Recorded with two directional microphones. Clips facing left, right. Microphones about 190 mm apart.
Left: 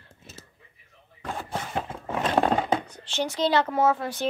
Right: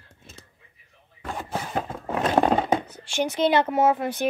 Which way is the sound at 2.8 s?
10° right (ahead or behind).